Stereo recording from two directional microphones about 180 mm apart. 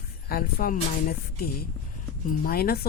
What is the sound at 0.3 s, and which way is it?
Speech, 55° left (ahead or behind).